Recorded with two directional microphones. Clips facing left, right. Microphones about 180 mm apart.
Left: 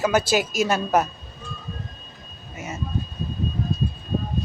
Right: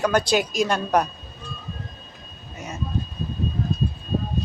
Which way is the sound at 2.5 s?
5° left (ahead or behind).